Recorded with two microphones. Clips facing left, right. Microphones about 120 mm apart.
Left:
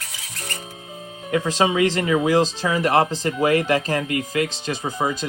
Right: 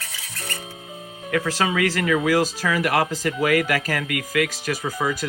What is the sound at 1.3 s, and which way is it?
Speech, 20° left (ahead or behind).